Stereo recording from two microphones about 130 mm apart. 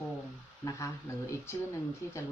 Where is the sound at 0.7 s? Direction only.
20° left (ahead or behind).